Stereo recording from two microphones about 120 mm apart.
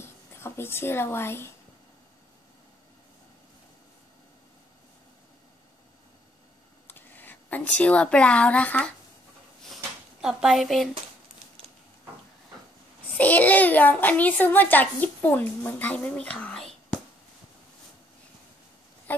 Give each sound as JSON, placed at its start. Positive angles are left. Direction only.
{"t": 0.0, "sound": "speech", "side_deg": 20}
{"t": 6.9, "sound": "speech", "side_deg": 15}
{"t": 10.2, "sound": "a woman's voice", "side_deg": -5}
{"t": 13.2, "sound": "a child's voice", "side_deg": 15}
{"t": 19.1, "sound": "speech", "side_deg": 15}